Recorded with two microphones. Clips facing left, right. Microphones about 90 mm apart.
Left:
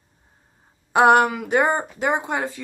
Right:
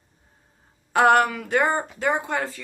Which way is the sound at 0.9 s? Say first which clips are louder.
Left 2 dB; 20° left (ahead or behind).